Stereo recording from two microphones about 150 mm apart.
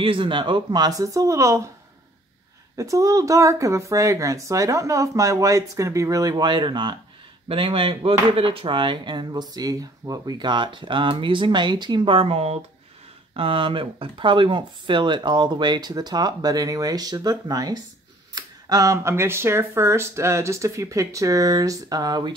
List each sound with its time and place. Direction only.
0.0 s speech: 35° right (ahead or behind)
2.7 s speech: 20° right (ahead or behind)